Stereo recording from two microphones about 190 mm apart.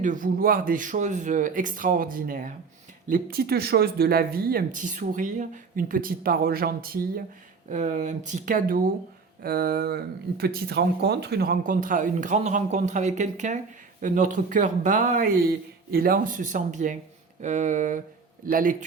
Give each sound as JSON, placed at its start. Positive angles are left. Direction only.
{"t": 0.0, "sound": "speech", "side_deg": -45}